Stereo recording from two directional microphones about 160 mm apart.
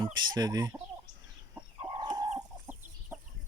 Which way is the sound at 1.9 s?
25° right (ahead or behind).